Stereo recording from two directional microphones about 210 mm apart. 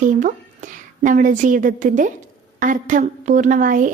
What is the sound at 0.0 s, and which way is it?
A woman's voice, 35° right (ahead or behind).